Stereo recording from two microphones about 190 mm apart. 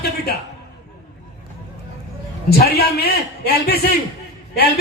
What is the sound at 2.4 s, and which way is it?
A man's voice, 55° left (ahead or behind).